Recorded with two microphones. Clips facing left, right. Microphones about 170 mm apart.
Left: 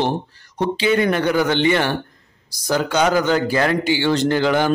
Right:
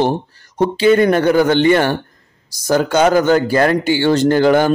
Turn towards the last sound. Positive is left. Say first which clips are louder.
# right 5 dB
turn(degrees=-45)  # may be behind; listen again after turning